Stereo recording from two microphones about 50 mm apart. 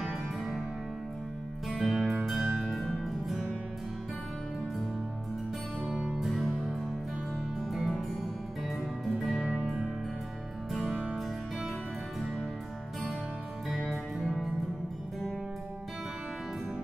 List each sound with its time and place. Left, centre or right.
0.1 s music: centre
1.8 s music: centre
5.9 s music: centre
6.1 s music: centre
10.8 s music: centre
13.7 s music: centre